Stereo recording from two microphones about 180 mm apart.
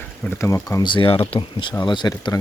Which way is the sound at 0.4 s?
15° left (ahead or behind).